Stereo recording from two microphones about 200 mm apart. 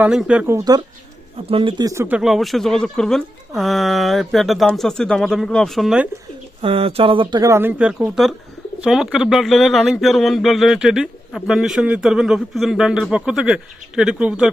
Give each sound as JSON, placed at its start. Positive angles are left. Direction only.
{"t": 0.0, "sound": "speech", "side_deg": -5}
{"t": 6.6, "sound": "speech", "side_deg": -30}